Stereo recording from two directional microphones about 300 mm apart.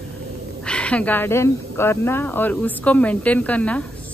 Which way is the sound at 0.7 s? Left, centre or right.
Centre.